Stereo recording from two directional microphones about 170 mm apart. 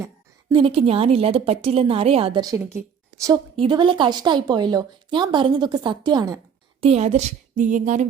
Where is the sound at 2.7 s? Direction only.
20° right (ahead or behind).